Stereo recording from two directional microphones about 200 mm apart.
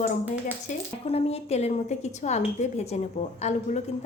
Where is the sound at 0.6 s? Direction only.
30° left (ahead or behind).